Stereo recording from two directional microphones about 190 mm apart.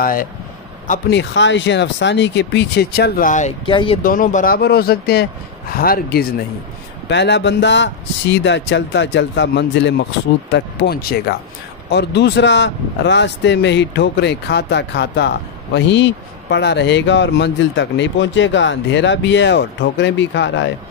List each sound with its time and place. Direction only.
0.0 s speech: 50° left (ahead or behind)
1.1 s speech: 70° left (ahead or behind); by 3.5 s 40° left (ahead or behind)
3.6 s speech: 25° left (ahead or behind)
4.0 s speech: 45° left (ahead or behind)
7.1 s speech: 65° left (ahead or behind)